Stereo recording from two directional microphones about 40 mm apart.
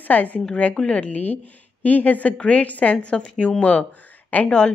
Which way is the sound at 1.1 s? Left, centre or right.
Left.